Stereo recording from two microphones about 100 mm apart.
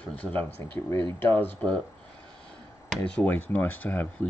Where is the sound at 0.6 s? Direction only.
25° left (ahead or behind).